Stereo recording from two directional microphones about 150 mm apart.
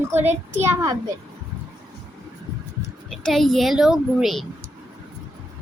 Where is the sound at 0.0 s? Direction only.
15° right (ahead or behind).